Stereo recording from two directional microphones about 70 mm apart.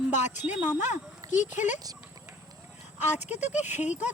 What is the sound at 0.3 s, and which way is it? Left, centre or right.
Speech, right.